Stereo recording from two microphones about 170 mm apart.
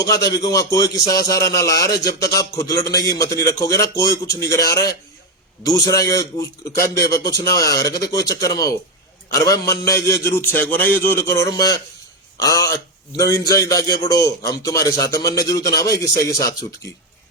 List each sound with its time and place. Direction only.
0.0 s a man's voice: 20° left (ahead or behind)
5.6 s a man's voice: 20° left (ahead or behind)